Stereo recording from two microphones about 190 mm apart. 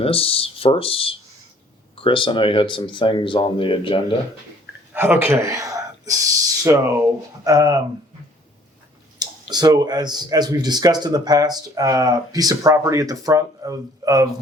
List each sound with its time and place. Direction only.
0.0 s speech: 30° left (ahead or behind)
4.9 s a man's voice: 10° right (ahead or behind)
9.1 s speech: 20° right (ahead or behind)